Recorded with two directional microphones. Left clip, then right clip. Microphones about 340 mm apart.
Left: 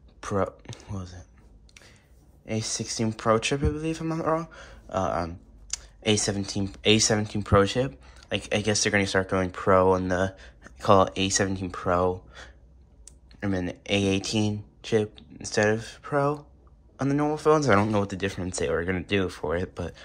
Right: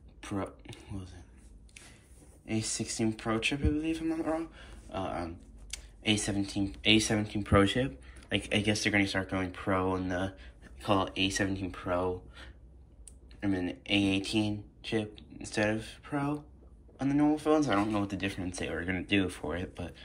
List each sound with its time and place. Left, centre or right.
0.2 s speech: centre
2.4 s speech: centre